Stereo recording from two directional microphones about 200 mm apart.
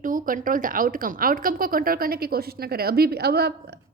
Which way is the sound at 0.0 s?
40° right (ahead or behind).